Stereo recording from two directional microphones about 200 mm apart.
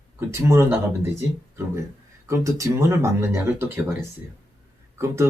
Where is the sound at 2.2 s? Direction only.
15° right (ahead or behind).